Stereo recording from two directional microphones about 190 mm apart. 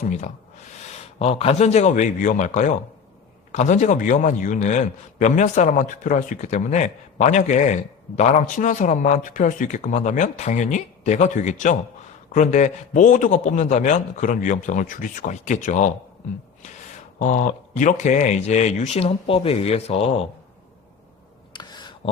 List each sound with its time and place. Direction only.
0.0 s a man's voice: 40° left (ahead or behind)
17.2 s a man's voice: 40° left (ahead or behind)
21.5 s a sound: 20° left (ahead or behind)